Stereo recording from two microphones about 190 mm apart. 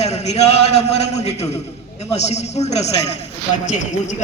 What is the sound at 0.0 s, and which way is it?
A man's voice, 35° left (ahead or behind).